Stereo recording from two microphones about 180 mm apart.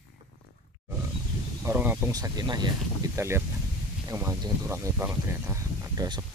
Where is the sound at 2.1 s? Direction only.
20° right (ahead or behind).